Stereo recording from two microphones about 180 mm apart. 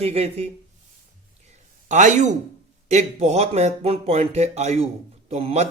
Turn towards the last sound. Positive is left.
turn(degrees=-35)  # may be behind; listen again after turning